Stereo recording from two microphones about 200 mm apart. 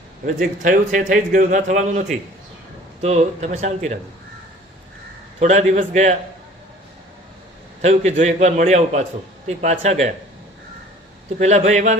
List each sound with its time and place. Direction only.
0.3 s a man's voice: 40° right (ahead or behind)
5.4 s a man's voice: 35° right (ahead or behind)
7.8 s a man's voice: 35° right (ahead or behind)
11.3 s a man's voice: 35° right (ahead or behind)